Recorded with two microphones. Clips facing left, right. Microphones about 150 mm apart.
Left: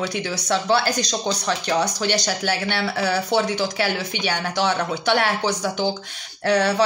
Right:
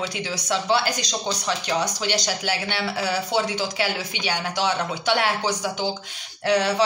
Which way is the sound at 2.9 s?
55° left (ahead or behind).